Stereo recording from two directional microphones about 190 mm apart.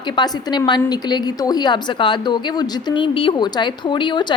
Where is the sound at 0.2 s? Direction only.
25° left (ahead or behind).